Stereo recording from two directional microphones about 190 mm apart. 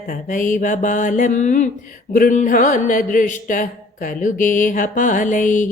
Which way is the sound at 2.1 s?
45° left (ahead or behind).